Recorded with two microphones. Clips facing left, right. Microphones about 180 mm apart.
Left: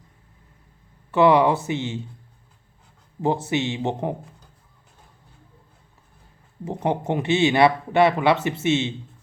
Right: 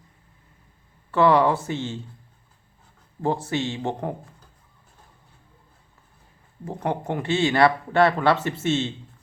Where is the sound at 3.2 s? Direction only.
20° left (ahead or behind).